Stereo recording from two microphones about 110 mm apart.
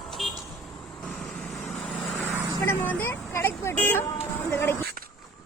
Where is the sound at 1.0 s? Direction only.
Centre (ahead or behind).